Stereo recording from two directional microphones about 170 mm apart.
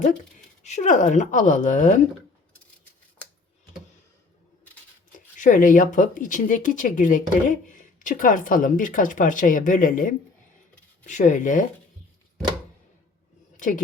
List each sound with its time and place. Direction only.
0.6 s speech: 45° left (ahead or behind)
5.4 s speech: 50° left (ahead or behind)
13.6 s speech: 50° left (ahead or behind)